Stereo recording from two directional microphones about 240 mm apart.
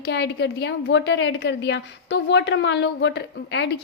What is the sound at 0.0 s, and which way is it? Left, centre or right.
A woman's voice, left.